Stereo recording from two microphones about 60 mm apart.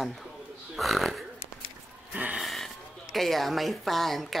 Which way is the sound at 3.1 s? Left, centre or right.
Centre.